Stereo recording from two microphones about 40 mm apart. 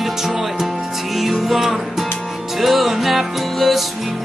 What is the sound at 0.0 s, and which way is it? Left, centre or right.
Music, centre.